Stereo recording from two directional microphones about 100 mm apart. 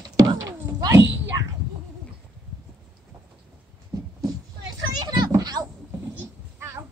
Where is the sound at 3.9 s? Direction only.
40° right (ahead or behind).